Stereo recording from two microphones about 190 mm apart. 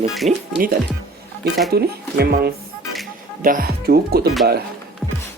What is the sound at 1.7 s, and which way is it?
Speech, 55° right (ahead or behind).